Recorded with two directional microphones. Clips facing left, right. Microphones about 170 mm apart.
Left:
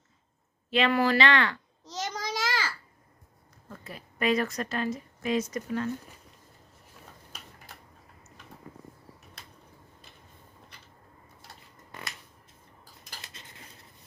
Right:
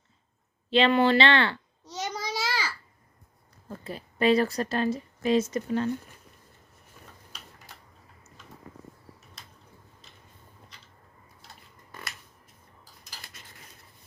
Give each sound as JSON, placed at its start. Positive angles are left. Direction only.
{"t": 0.7, "sound": "speech", "side_deg": -25}
{"t": 1.9, "sound": "babbling", "side_deg": -10}
{"t": 3.7, "sound": "a woman's voice", "side_deg": -30}
{"t": 13.2, "sound": "dishes", "side_deg": 25}